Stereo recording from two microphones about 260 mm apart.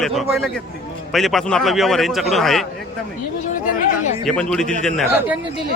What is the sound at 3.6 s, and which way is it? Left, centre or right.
Speech, left.